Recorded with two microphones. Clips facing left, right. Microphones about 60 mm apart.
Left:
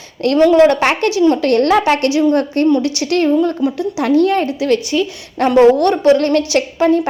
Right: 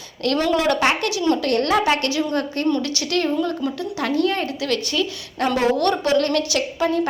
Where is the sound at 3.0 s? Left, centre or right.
Left.